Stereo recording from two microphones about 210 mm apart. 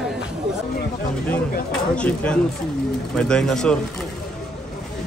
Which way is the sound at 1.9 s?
5° left (ahead or behind).